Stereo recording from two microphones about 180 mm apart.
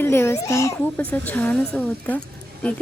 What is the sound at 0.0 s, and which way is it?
A child's voice, 15° left (ahead or behind).